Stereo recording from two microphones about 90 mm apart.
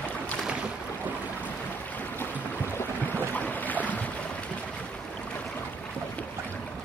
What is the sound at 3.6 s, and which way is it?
Boat, 20° left (ahead or behind).